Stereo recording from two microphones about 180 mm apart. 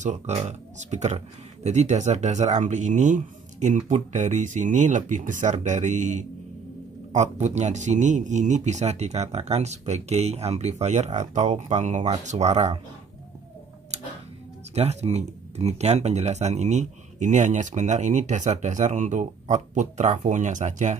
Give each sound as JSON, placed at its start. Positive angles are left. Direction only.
{"t": 0.0, "sound": "speech", "side_deg": -40}
{"t": 14.7, "sound": "speech", "side_deg": -35}